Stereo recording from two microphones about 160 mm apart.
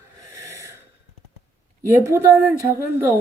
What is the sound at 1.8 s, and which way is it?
A woman's voice, 15° right (ahead or behind).